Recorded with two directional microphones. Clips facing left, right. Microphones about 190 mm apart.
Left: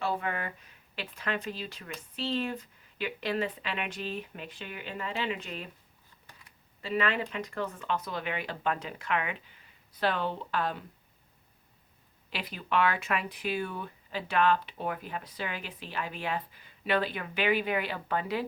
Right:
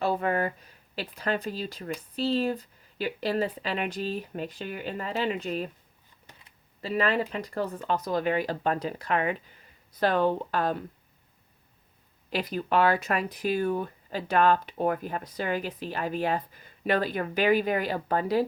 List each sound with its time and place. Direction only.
0.0 s speech: 40° right (ahead or behind)
6.8 s speech: 35° right (ahead or behind)
12.3 s speech: 40° right (ahead or behind)